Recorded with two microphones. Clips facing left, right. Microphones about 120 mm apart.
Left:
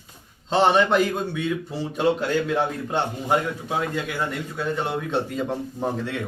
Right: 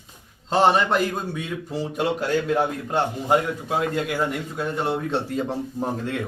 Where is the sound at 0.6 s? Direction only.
5° right (ahead or behind).